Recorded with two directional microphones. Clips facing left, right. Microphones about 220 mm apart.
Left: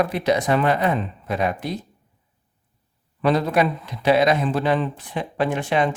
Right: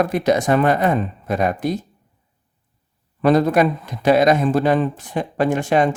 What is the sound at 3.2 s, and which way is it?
Speech, 45° right (ahead or behind).